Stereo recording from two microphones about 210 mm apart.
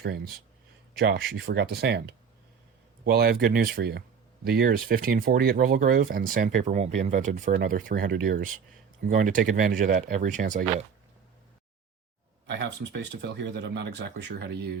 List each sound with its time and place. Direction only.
0.9 s speech: 50° right (ahead or behind)
12.5 s speech: 55° right (ahead or behind)